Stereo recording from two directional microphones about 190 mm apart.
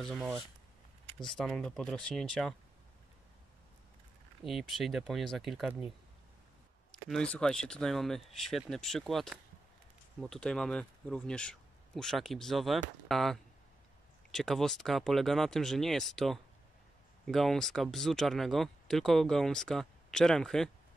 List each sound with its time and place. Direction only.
0.0 s speech: centre (ahead or behind)
4.4 s speech: centre (ahead or behind)
7.1 s speech: 5° left (ahead or behind)